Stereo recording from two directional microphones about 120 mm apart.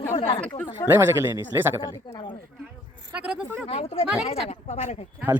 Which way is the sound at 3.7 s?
55° left (ahead or behind).